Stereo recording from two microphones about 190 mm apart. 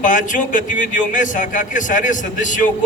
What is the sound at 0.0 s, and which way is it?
A man's voice, 40° left (ahead or behind).